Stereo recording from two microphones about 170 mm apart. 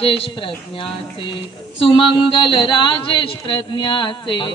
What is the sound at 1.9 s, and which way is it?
Speech, 30° left (ahead or behind).